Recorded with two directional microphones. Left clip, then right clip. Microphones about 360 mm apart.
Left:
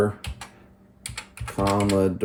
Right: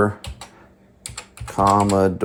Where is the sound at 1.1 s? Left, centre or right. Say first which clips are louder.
Right 7 dB; centre.